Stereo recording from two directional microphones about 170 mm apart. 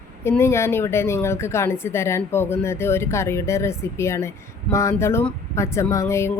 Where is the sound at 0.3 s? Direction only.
15° left (ahead or behind).